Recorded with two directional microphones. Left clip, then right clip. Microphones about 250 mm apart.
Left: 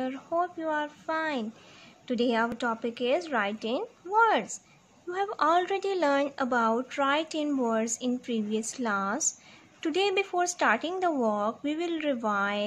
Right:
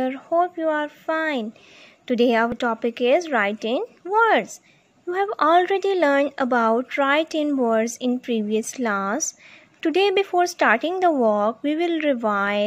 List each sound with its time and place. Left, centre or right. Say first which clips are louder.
0.0 s speech: right 9 dB; right